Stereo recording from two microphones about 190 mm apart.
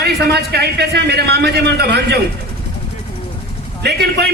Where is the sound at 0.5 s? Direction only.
60° right (ahead or behind).